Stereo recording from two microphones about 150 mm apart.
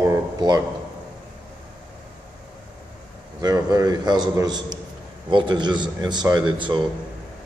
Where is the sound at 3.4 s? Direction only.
25° right (ahead or behind).